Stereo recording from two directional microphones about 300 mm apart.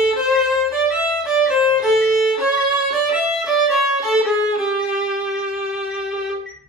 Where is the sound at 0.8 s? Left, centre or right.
Centre.